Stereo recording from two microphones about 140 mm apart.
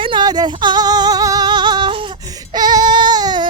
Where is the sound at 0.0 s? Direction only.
35° right (ahead or behind).